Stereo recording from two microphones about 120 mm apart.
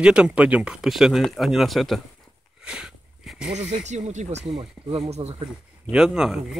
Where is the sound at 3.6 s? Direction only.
70° right (ahead or behind).